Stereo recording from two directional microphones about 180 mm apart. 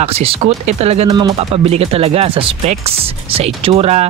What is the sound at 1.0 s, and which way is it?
Speech, 20° right (ahead or behind).